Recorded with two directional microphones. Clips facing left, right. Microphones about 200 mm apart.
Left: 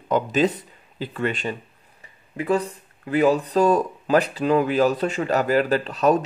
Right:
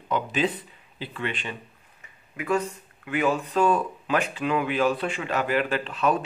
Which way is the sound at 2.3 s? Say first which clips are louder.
Left 3 dB; 30° left (ahead or behind).